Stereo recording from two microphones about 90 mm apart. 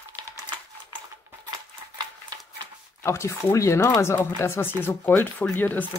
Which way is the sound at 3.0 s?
30° left (ahead or behind).